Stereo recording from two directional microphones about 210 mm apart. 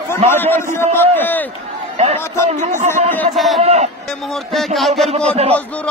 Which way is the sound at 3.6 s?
30° right (ahead or behind).